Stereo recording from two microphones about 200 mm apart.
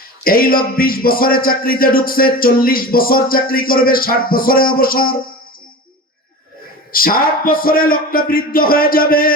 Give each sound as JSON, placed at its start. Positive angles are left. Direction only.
{"t": 0.3, "sound": "speech", "side_deg": 45}
{"t": 6.9, "sound": "speech", "side_deg": 45}